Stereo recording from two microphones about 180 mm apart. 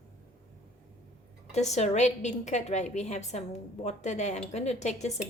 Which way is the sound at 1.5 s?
40° left (ahead or behind).